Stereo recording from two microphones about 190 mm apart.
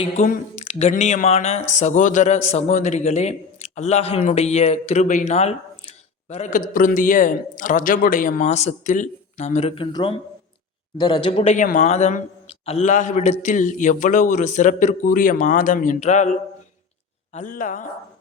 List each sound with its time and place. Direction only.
0.3 s speech: 35° left (ahead or behind)
17.3 s speech: 45° left (ahead or behind)